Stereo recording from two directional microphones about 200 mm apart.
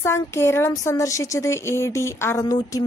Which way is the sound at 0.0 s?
15° left (ahead or behind).